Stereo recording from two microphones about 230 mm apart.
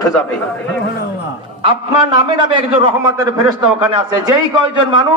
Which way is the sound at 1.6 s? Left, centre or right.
Right.